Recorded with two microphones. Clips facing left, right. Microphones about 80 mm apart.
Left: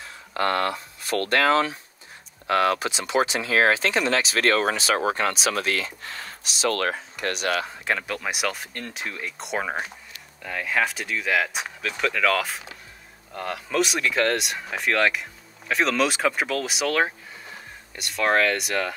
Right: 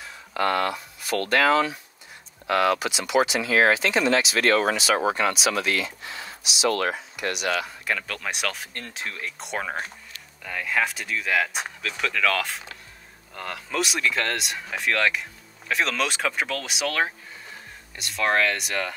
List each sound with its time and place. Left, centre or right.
0.3 s speech: centre
0.7 s speech: left
8.1 s speech: centre
13.3 s speech: left
13.7 s speech: centre